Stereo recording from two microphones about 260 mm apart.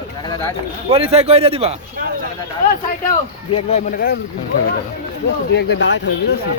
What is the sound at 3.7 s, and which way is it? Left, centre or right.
Speech, left.